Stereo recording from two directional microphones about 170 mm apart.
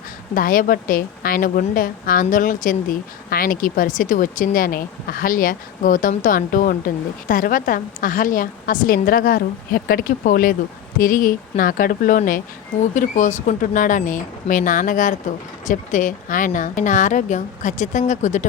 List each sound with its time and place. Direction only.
0.3 s a woman's voice: 55° left (ahead or behind)